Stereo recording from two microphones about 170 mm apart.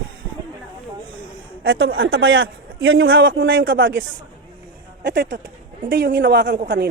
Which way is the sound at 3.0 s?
65° right (ahead or behind).